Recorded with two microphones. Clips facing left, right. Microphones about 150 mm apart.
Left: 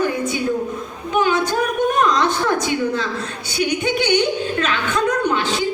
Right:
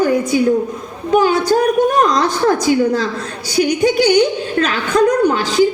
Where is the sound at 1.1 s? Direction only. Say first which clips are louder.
Right 6 dB; 35° right (ahead or behind).